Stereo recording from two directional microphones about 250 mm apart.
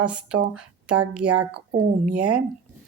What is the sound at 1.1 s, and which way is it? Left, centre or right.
Speech, centre.